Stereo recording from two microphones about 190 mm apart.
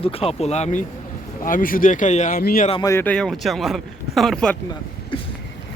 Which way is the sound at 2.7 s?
20° left (ahead or behind).